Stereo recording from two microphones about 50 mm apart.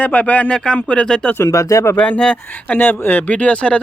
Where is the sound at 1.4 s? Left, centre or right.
Left.